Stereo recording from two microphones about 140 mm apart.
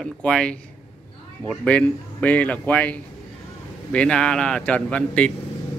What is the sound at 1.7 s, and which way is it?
Speech, 10° left (ahead or behind).